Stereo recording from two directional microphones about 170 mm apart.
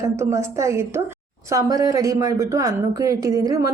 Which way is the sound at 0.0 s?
15° right (ahead or behind).